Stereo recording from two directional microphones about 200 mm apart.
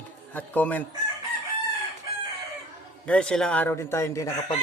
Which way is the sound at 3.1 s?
5° left (ahead or behind).